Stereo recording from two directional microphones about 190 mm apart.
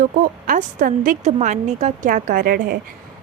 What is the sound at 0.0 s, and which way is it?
Speech, 45° right (ahead or behind).